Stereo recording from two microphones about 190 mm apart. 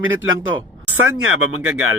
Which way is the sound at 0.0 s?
90° right.